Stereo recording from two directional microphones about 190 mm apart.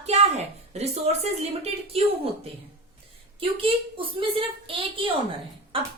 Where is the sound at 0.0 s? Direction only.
35° right (ahead or behind).